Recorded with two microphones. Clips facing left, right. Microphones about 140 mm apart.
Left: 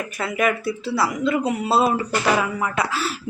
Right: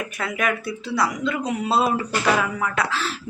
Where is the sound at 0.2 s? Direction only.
5° left (ahead or behind).